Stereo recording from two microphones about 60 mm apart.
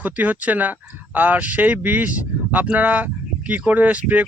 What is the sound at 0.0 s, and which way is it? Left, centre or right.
Speech, right.